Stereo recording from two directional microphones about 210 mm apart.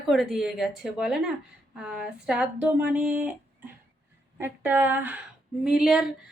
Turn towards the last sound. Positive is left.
turn(degrees=0)  # may be behind; listen again after turning